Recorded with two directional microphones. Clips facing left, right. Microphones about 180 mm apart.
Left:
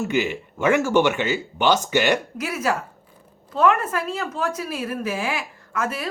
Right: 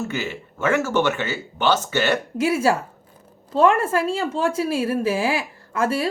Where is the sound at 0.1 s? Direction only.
15° left (ahead or behind).